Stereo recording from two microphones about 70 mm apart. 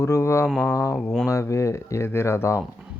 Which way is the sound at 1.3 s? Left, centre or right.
Left.